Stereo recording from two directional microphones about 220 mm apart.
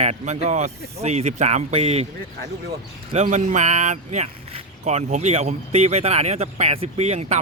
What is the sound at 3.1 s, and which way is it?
Speech, 35° right (ahead or behind).